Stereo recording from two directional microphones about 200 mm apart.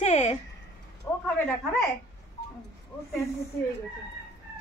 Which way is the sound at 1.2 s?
5° left (ahead or behind).